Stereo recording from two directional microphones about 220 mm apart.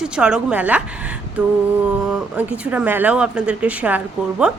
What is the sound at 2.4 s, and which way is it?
A woman's voice, 5° right (ahead or behind).